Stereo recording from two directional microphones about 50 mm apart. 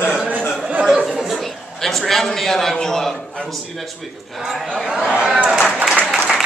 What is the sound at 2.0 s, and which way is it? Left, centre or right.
Speech, centre.